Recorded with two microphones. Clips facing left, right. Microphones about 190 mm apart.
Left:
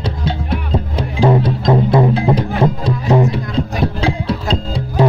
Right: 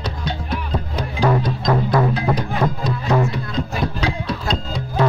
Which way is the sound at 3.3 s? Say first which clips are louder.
Left 5 dB; 30° left (ahead or behind).